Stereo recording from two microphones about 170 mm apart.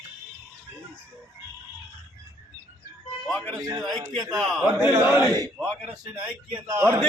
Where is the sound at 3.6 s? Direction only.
20° right (ahead or behind).